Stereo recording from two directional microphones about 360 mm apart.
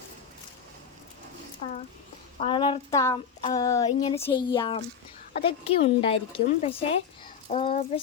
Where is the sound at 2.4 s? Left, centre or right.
Centre.